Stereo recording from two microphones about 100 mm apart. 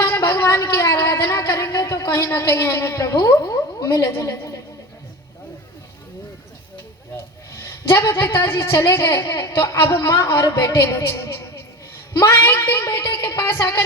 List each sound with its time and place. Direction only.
0.0 s a sound: 30° left (ahead or behind)
2.0 s a woman's voice: 30° left (ahead or behind)
7.6 s a woman's voice: 30° left (ahead or behind)